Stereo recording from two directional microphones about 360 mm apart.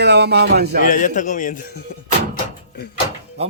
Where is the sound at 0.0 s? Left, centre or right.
Right.